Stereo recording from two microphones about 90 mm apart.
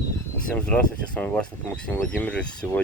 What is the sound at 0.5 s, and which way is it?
Speech, 15° left (ahead or behind).